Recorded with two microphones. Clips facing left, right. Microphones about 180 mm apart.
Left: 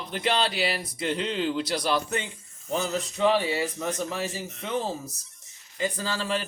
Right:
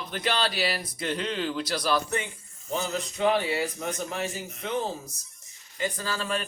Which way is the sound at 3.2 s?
25° left (ahead or behind).